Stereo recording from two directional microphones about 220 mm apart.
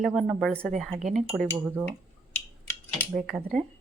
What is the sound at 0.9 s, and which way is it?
Speech, 35° right (ahead or behind).